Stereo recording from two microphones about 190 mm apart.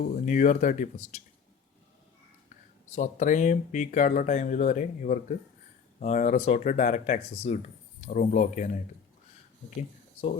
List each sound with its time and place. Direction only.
0.0 s speech: 45° left (ahead or behind)
2.9 s speech: 40° left (ahead or behind)